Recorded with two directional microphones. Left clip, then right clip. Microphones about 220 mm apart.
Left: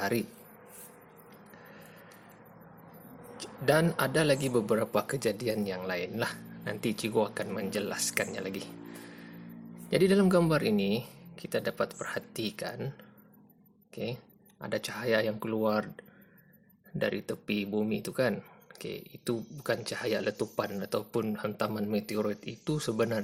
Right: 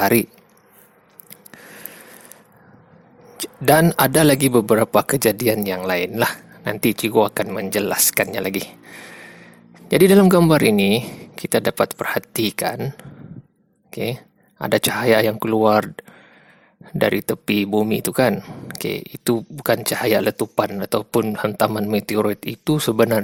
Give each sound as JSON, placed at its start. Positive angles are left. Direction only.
{"t": 0.0, "sound": "speech", "side_deg": -45}
{"t": 3.3, "sound": "speech", "side_deg": -45}
{"t": 9.9, "sound": "speech", "side_deg": -40}